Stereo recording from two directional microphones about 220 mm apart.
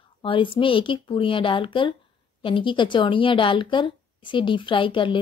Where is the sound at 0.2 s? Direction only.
25° left (ahead or behind).